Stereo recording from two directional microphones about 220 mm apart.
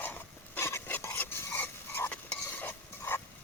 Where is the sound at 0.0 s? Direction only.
10° left (ahead or behind).